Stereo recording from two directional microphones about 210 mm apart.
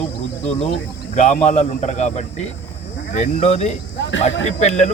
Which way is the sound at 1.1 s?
35° left (ahead or behind).